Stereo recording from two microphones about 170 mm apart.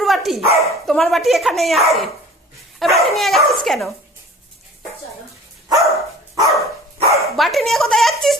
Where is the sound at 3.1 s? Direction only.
Centre (ahead or behind).